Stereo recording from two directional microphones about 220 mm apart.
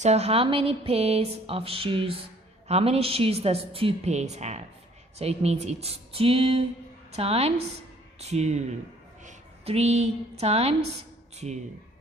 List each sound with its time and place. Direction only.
0.0 s a woman's voice: 30° right (ahead or behind)